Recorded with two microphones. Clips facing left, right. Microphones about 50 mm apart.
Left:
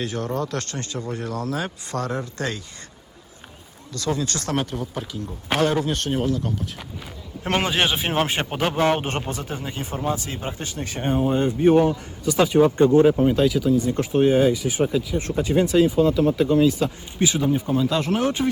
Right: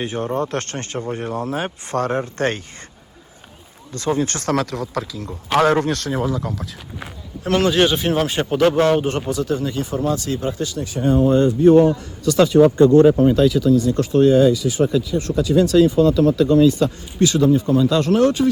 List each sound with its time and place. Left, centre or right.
0.0 s speech: right
3.9 s speech: right
4.5 s speech: right
5.7 s speech: right
7.4 s speech: left
8.1 s speech: left
9.0 s a man's voice: left
10.8 s speech: left
11.1 s speech: centre